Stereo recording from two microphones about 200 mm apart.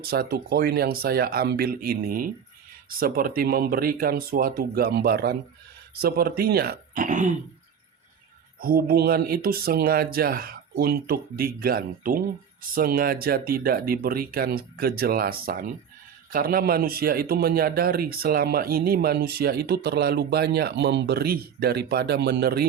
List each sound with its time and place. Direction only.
0.0 s a man's voice: 50° right (ahead or behind)
8.6 s a man's voice: 50° right (ahead or behind)